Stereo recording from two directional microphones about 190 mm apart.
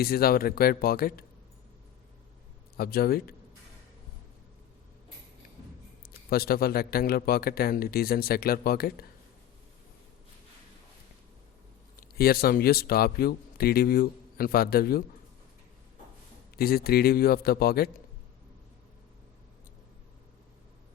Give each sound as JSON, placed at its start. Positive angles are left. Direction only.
{"t": 0.0, "sound": "speech", "side_deg": 55}
{"t": 2.7, "sound": "a man's voice", "side_deg": 55}
{"t": 6.0, "sound": "speech", "side_deg": 55}
{"t": 11.9, "sound": "speech", "side_deg": 55}
{"t": 16.6, "sound": "speech", "side_deg": 55}